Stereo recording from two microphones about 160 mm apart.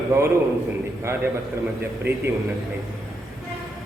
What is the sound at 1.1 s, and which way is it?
Speech, 15° right (ahead or behind).